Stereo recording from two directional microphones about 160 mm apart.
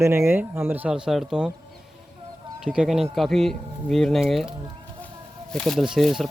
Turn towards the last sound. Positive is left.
turn(degrees=0)  # may be behind; listen again after turning